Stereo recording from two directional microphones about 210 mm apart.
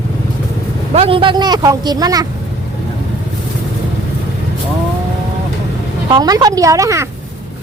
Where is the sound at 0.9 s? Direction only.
25° right (ahead or behind).